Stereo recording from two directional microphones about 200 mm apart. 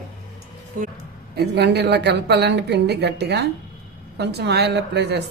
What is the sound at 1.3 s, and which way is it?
A woman's voice, 55° right (ahead or behind).